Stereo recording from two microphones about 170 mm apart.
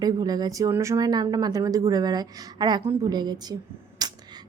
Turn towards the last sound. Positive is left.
turn(degrees=-25)  # may be behind; listen again after turning